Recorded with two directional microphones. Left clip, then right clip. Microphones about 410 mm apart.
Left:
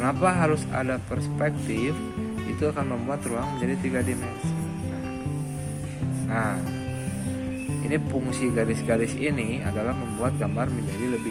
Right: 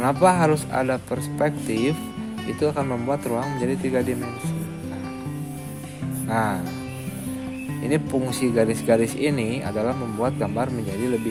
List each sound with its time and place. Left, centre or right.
0.0 s speech: right
6.2 s music: right
7.9 s speech: right